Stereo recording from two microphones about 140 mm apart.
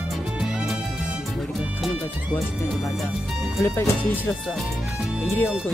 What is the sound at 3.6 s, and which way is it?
Speech, 20° left (ahead or behind).